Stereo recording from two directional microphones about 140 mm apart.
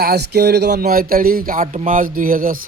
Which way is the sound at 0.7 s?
90° right.